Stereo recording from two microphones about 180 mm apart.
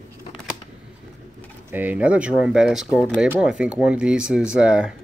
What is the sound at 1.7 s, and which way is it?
Speech, 10° right (ahead or behind).